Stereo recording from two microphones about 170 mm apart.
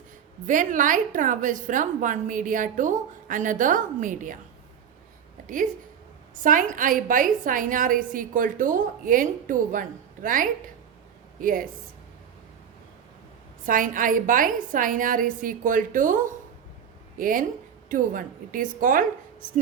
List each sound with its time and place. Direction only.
0.4 s a woman's voice: 50° right (ahead or behind)
6.3 s a woman's voice: 50° right (ahead or behind)
13.7 s a woman's voice: 50° right (ahead or behind)